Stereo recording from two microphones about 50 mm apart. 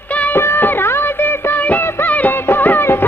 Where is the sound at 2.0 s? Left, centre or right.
Left.